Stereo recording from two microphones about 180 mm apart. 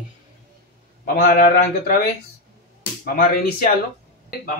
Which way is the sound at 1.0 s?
55° left (ahead or behind).